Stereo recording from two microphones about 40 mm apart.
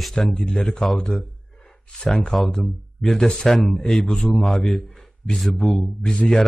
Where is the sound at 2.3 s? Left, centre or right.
Centre.